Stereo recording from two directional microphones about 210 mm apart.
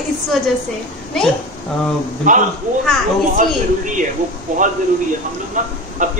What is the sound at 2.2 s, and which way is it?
A man's voice, 40° right (ahead or behind).